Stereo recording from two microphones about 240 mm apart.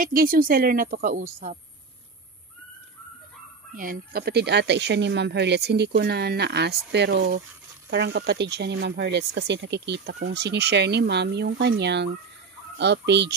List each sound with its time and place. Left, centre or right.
0.0 s a woman's voice: right
3.7 s speech: right